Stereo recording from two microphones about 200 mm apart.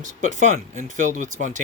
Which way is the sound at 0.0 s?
40° right (ahead or behind).